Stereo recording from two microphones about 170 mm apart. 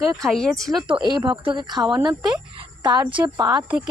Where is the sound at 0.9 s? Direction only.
25° right (ahead or behind).